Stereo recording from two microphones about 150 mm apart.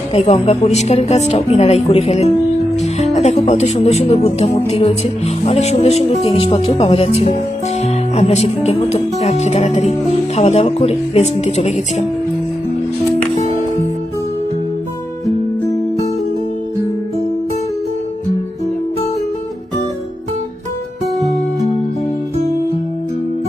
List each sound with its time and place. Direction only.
0.1 s a woman's voice: 40° left (ahead or behind)